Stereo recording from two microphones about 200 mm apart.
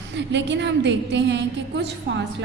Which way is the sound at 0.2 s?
60° right (ahead or behind).